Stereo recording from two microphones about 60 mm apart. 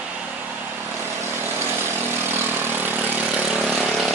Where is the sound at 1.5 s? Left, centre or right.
Right.